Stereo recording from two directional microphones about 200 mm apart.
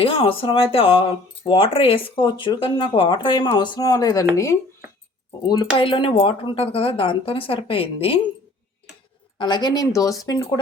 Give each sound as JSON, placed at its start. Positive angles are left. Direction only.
{"t": 0.0, "sound": "speech", "side_deg": 25}
{"t": 5.5, "sound": "speech", "side_deg": 25}
{"t": 9.4, "sound": "speech", "side_deg": 20}